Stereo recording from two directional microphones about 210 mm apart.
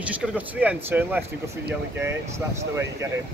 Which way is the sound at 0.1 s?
5° right (ahead or behind).